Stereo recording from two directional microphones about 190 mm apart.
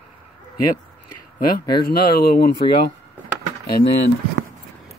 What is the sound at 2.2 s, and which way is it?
Speech, 55° left (ahead or behind).